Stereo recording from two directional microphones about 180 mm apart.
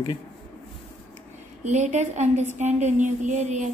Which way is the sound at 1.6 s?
40° right (ahead or behind).